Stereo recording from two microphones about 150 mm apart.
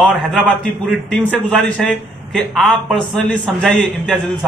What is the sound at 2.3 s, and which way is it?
Speech, centre (ahead or behind).